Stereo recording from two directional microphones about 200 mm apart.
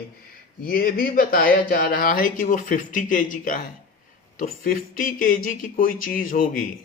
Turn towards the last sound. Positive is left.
turn(degrees=45)  # may be behind; listen again after turning